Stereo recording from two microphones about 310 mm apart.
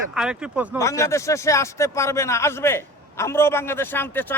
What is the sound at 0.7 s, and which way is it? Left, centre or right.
A man's voice, centre.